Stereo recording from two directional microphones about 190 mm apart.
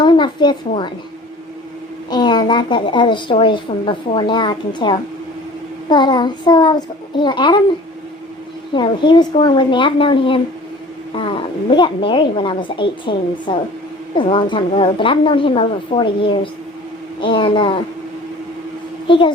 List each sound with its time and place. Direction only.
0.0 s a sound: 25° left (ahead or behind)
2.0 s a woman's voice: 25° left (ahead or behind)
8.7 s a woman's voice: 25° left (ahead or behind)
19.0 s a child's voice: 25° left (ahead or behind)